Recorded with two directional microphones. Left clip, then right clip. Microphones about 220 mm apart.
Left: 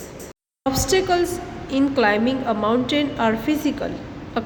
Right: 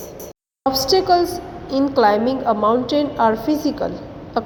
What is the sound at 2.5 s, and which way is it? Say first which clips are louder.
Speech: right 5 dB; 15° left (ahead or behind).